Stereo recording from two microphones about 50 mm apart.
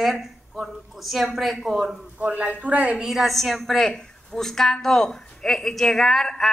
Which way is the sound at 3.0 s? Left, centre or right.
Centre.